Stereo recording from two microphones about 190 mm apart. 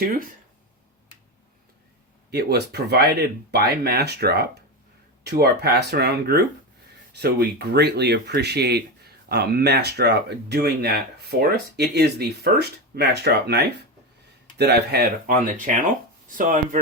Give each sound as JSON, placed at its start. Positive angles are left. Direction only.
{"t": 2.3, "sound": "speech", "side_deg": -60}